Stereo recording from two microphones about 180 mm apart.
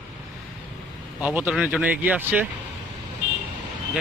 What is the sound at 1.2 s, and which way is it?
Speech, 10° right (ahead or behind).